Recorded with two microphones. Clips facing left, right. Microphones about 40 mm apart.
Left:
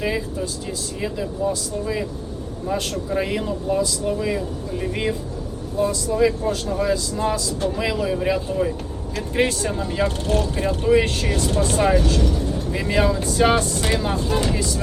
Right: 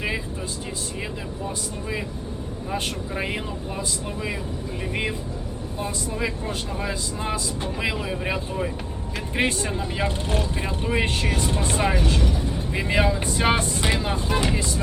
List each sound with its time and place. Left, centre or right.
1.0 s speech: centre
3.1 s speech: centre
5.7 s speech: right
13.9 s speech: centre